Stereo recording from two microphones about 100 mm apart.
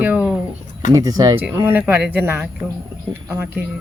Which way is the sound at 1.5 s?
20° right (ahead or behind).